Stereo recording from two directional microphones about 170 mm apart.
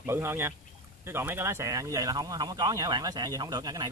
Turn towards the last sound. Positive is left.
turn(degrees=-25)  # may be behind; listen again after turning